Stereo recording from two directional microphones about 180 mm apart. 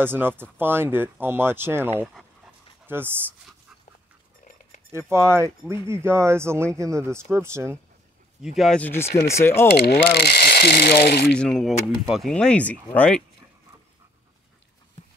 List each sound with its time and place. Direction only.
0.0 s speech: 10° right (ahead or behind)
4.9 s speech: 15° right (ahead or behind)
8.4 s speech: centre (ahead or behind)
9.0 s speech: 35° left (ahead or behind)
9.4 s speech: 15° left (ahead or behind)
9.8 s speech: 60° left (ahead or behind)
11.3 s speech: 5° left (ahead or behind)